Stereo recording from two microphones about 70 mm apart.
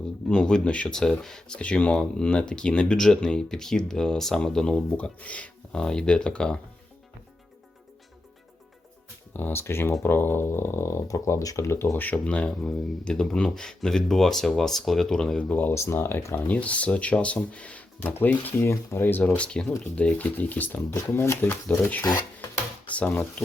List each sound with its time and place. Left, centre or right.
0.3 s speech: centre
4.9 s speech: centre
9.3 s speech: left
12.0 s speech: centre
15.7 s speech: left
16.5 s speech: centre
19.4 s speech: centre
20.9 s speech: left
23.0 s speech: centre